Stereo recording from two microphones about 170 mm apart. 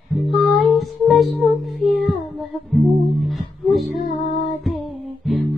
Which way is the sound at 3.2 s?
Centre (ahead or behind).